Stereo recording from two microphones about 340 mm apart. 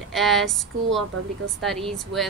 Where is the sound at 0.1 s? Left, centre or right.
Centre.